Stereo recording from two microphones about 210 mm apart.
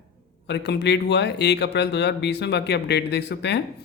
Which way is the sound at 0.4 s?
55° left (ahead or behind).